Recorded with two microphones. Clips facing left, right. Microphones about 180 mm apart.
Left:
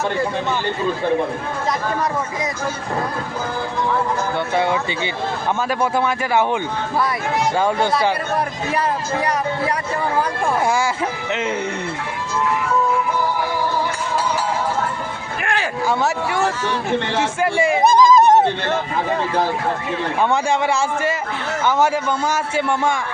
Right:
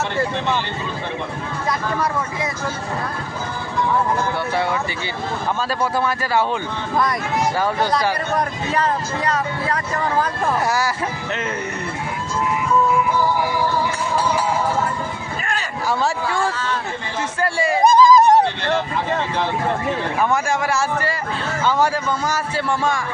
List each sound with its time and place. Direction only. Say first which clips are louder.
4.5 s speech: left 4 dB; 20° left (ahead or behind)
5.8 s speech: left 1 dB; 20° left (ahead or behind)
11.3 s speech: left 5 dB; 20° left (ahead or behind)
15.9 s speech: right 1 dB; 20° left (ahead or behind)
17.8 s a sound: right 1 dB; 15° left (ahead or behind)
21.6 s speech: left 1 dB; 15° left (ahead or behind)